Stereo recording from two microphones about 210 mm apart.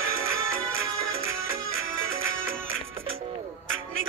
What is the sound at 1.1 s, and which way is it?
Music, 70° right (ahead or behind).